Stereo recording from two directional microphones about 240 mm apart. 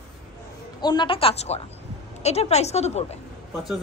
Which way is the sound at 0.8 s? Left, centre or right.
Centre.